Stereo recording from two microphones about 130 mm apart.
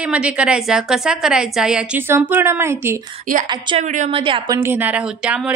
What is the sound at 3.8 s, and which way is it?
Speech, 70° right (ahead or behind).